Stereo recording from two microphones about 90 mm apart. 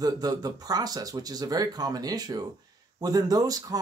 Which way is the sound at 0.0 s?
45° right (ahead or behind).